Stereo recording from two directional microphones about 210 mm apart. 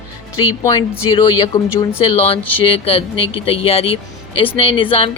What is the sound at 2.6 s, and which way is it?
Speech, 25° left (ahead or behind).